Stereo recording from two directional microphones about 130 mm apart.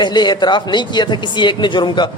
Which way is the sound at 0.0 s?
35° left (ahead or behind).